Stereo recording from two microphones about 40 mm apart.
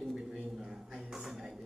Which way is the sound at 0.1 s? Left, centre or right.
Centre.